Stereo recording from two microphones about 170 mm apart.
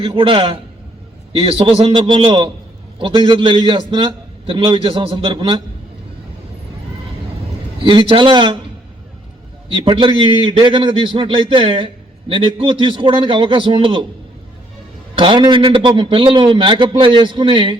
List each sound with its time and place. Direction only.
0.0 s a man's voice: 30° right (ahead or behind)
7.9 s a man's voice: 30° right (ahead or behind)
9.7 s a man's voice: 30° right (ahead or behind)
15.2 s a man's voice: 30° right (ahead or behind)